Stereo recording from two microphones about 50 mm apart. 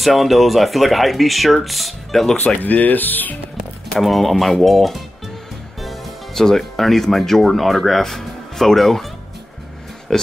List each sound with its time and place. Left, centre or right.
0.0 s speech: centre
2.6 s speech: left
3.9 s speech: centre